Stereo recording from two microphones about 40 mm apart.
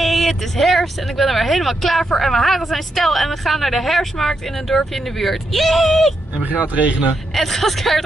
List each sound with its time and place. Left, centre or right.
0.0 s a woman's voice: centre
6.4 s speech: right
7.3 s a woman's voice: centre